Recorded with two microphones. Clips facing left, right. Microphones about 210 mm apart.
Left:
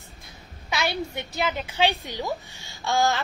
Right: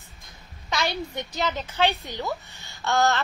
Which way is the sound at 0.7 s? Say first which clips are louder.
Left 1 dB; 10° left (ahead or behind).